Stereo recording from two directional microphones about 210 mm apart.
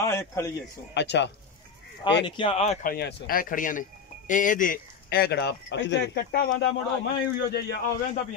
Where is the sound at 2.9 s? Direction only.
45° left (ahead or behind).